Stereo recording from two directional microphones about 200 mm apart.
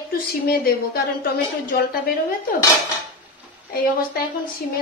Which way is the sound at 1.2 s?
50° left (ahead or behind).